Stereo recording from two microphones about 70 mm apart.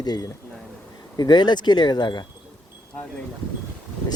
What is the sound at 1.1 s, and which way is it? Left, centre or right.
Speech, left.